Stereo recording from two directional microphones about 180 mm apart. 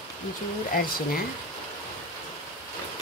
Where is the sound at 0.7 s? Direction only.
55° left (ahead or behind).